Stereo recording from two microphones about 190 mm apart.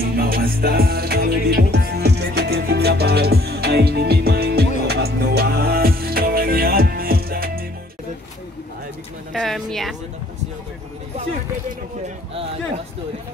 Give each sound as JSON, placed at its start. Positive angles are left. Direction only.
{"t": 0.0, "sound": "music", "side_deg": -50}
{"t": 9.3, "sound": "a woman's voice", "side_deg": 0}